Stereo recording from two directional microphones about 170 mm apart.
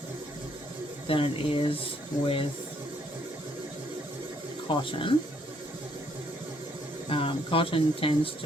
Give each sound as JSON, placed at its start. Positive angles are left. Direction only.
{"t": 1.0, "sound": "speech", "side_deg": 30}
{"t": 4.9, "sound": "speech", "side_deg": 30}
{"t": 7.1, "sound": "speech", "side_deg": 30}